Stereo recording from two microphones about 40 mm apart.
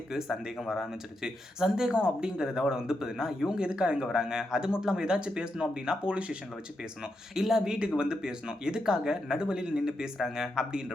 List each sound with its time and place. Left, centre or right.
0.1 s speech: centre
3.6 s speech: right
7.4 s speech: centre